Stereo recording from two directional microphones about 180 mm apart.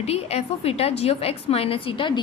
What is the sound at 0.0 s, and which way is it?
A woman's voice, 35° left (ahead or behind).